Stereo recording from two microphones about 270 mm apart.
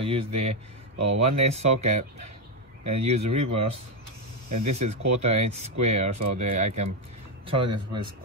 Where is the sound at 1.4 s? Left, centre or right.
Right.